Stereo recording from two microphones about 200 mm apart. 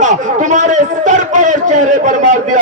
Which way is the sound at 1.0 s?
40° right (ahead or behind).